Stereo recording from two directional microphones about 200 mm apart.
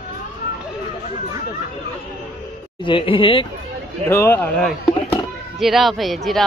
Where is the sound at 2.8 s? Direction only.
25° left (ahead or behind).